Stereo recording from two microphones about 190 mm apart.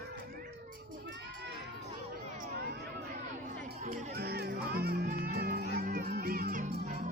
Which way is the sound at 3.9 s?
55° right (ahead or behind).